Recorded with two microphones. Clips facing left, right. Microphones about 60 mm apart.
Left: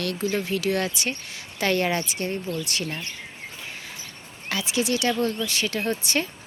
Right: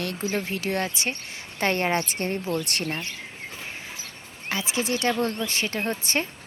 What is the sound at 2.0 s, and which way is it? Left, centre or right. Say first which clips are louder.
Speech: right 1 dB; right.